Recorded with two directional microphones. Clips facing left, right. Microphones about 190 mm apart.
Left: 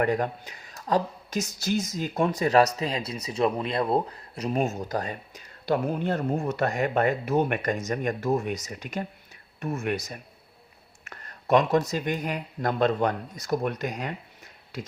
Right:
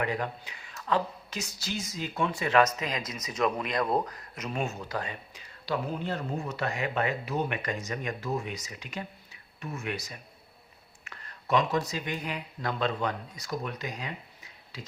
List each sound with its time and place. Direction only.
0.0 s speech: 45° left (ahead or behind)
4.6 s speech: 45° left (ahead or behind)